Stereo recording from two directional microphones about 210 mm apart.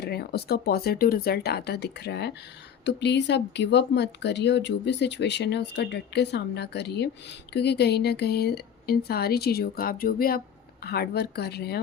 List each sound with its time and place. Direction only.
0.0 s a woman's voice: 50° left (ahead or behind)